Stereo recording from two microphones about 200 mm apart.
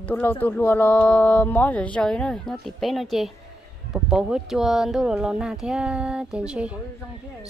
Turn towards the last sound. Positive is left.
turn(degrees=-5)  # may be behind; listen again after turning